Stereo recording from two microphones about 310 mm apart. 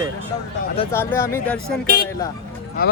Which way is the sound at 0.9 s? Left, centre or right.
Centre.